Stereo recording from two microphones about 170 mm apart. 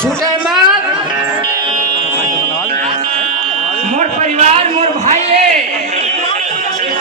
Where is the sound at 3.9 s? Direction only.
40° right (ahead or behind).